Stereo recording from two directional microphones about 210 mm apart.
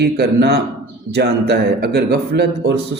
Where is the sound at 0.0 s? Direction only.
50° right (ahead or behind).